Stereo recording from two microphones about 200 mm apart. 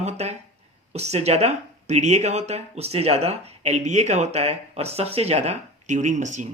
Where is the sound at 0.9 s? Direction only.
30° right (ahead or behind).